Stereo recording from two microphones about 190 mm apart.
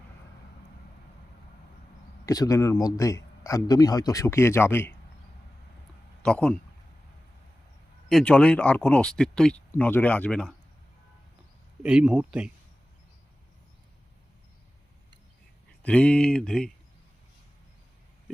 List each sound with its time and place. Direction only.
2.2 s a man's voice: 20° left (ahead or behind)
6.2 s speech: 5° left (ahead or behind)
8.1 s a man's voice: 5° left (ahead or behind)
11.8 s speech: 5° right (ahead or behind)
15.8 s speech: 5° left (ahead or behind)